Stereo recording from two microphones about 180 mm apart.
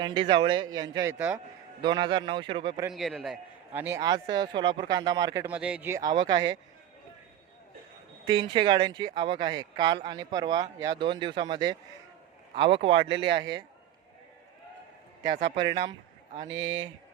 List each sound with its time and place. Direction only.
0.0 s speech: 25° right (ahead or behind)
2.9 s a man's voice: centre (ahead or behind)
3.8 s a man's voice: 10° right (ahead or behind)
4.0 s speech: 25° right (ahead or behind)
5.5 s speech: 5° right (ahead or behind); by 6.6 s 20° right (ahead or behind)
8.2 s speech: 25° right (ahead or behind)
15.4 s speech: 25° right (ahead or behind)
16.5 s speech: 90° right